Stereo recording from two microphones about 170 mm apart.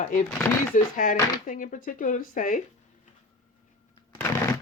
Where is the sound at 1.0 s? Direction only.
55° left (ahead or behind).